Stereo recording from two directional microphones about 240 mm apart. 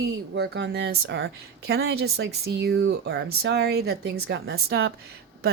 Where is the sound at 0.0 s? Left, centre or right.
Right.